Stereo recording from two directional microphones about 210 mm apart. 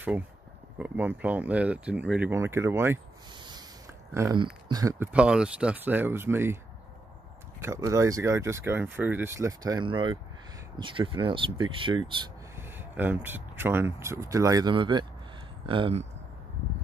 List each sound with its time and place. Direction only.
0.7 s speech: 10° right (ahead or behind)
4.1 s speech: 15° right (ahead or behind)
7.6 s speech: 15° right (ahead or behind)
12.5 s speech: 10° right (ahead or behind); by 16.1 s 25° right (ahead or behind)